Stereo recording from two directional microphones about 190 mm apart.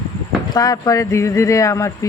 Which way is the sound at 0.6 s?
20° left (ahead or behind).